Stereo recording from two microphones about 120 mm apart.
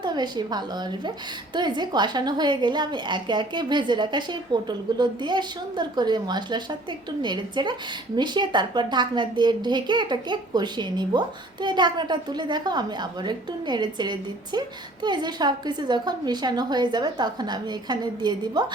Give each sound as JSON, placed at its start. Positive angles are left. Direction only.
{"t": 0.0, "sound": "a woman's voice", "side_deg": -35}